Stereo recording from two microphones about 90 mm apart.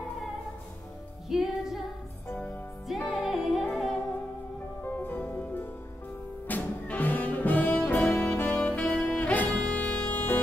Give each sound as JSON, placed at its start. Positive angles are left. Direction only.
{"t": 1.3, "sound": "music", "side_deg": -5}
{"t": 2.9, "sound": "music", "side_deg": -5}
{"t": 4.8, "sound": "music", "side_deg": 20}